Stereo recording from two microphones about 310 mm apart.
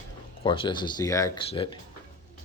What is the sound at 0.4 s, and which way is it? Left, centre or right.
Speech, centre.